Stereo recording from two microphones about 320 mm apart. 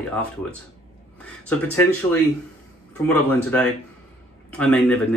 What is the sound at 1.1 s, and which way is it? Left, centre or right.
Speech, centre.